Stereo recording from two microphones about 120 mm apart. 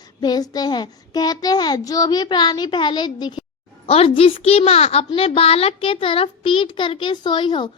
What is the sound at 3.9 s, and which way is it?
A child's voice, 55° left (ahead or behind).